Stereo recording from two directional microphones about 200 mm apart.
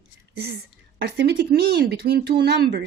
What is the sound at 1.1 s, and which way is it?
Speech, 55° right (ahead or behind).